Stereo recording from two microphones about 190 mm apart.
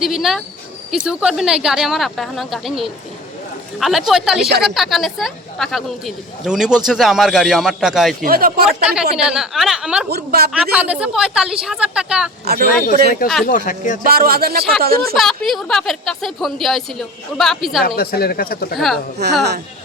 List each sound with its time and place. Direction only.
0.0 s speech: centre (ahead or behind)
8.2 s speech: 50° right (ahead or behind)
8.6 s speech: 5° right (ahead or behind)
12.5 s speech: 55° right (ahead or behind)
13.4 s speech: 45° left (ahead or behind)
14.0 s speech: 50° right (ahead or behind)
15.1 s speech: centre (ahead or behind)
17.8 s speech: 50° left (ahead or behind)